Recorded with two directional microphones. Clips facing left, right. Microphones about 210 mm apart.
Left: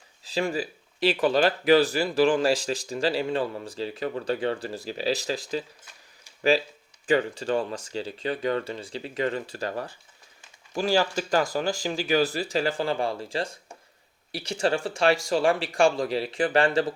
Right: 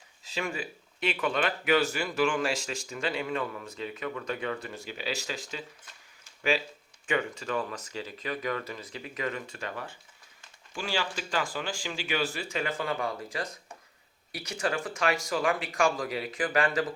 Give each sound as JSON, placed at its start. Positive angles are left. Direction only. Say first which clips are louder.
{"t": 0.3, "sound": "speech", "louder": "left 7 dB", "side_deg": 35}
{"t": 7.1, "sound": "speech", "louder": "left 6 dB", "side_deg": 35}